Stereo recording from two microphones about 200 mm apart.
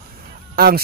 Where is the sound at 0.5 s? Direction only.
50° right (ahead or behind).